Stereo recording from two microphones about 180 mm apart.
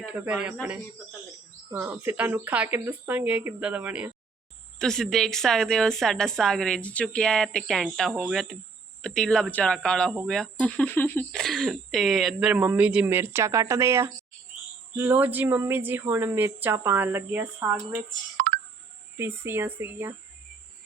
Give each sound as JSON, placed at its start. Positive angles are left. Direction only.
{"t": 0.0, "sound": "a woman's voice", "side_deg": -5}
{"t": 1.7, "sound": "a woman's voice", "side_deg": -15}
{"t": 4.8, "sound": "a woman's voice", "side_deg": 5}
{"t": 18.3, "sound": "a sound", "side_deg": -55}
{"t": 19.1, "sound": "a woman's voice", "side_deg": -15}